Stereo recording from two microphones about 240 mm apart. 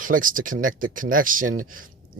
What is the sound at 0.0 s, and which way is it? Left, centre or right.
Speech, right.